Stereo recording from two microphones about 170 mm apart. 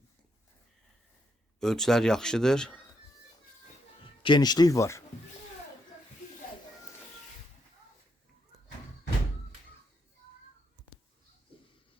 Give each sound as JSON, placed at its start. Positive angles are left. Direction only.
{"t": 1.5, "sound": "a man's voice", "side_deg": 5}
{"t": 4.0, "sound": "speech", "side_deg": 30}